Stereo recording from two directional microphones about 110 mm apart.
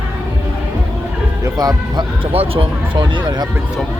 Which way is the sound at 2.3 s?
60° right (ahead or behind).